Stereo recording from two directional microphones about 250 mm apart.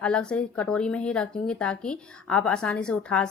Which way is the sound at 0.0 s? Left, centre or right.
Centre.